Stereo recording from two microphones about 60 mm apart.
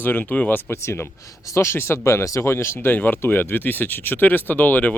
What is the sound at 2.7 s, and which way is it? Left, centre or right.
Speech, left.